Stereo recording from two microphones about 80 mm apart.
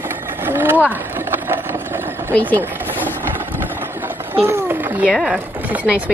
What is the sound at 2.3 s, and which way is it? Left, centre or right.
Speech, left.